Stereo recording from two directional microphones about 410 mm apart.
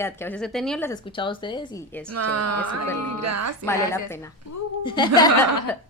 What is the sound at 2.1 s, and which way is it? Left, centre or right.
A woman's voice, right.